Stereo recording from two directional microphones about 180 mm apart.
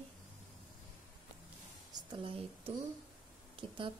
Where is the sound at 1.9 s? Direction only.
25° right (ahead or behind).